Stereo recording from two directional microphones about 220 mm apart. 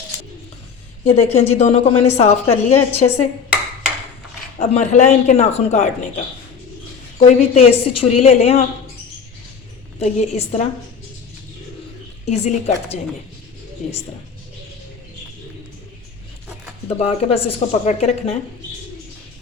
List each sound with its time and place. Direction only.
1.1 s a woman's voice: 30° left (ahead or behind)
4.6 s a woman's voice: 30° left (ahead or behind)
10.0 s a woman's voice: 30° left (ahead or behind)
12.2 s speech: 30° left (ahead or behind)
17.0 s a woman's voice: 30° left (ahead or behind)